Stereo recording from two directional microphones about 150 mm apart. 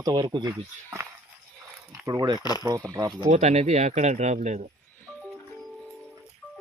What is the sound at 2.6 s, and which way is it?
Speech, 25° right (ahead or behind).